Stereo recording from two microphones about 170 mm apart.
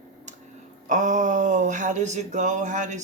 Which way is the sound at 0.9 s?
45° right (ahead or behind).